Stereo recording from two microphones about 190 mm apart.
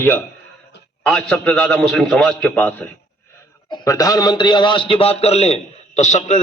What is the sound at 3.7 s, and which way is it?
A man's voice, 20° left (ahead or behind).